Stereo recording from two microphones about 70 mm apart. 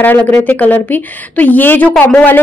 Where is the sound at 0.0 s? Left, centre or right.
Left.